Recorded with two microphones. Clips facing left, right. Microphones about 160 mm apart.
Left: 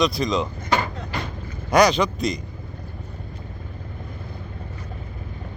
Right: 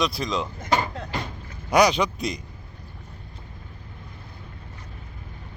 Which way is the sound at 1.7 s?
10° right (ahead or behind).